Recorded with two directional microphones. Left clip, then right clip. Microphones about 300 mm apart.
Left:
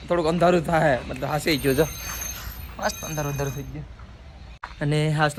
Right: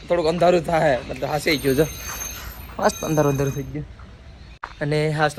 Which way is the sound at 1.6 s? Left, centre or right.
Left.